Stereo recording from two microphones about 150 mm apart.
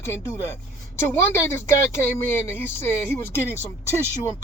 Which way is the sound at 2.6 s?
15° left (ahead or behind).